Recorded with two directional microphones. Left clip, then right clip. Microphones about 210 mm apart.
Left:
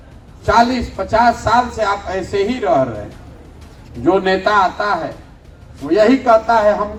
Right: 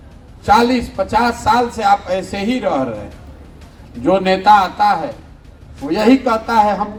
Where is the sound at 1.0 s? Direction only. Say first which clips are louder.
Left 2 dB; 50° right (ahead or behind).